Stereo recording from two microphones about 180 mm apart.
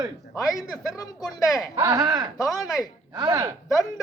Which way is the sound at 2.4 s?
Centre (ahead or behind).